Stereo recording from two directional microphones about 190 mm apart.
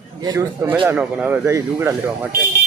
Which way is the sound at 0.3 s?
20° right (ahead or behind).